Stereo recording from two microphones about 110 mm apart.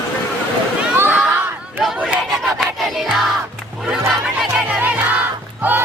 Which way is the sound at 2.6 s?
Centre (ahead or behind).